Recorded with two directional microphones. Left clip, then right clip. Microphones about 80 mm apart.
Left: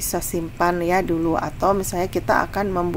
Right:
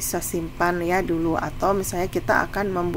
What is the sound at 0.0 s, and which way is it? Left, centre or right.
A woman's voice, centre.